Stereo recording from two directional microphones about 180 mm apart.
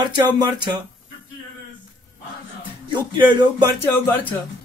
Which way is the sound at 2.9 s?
25° right (ahead or behind).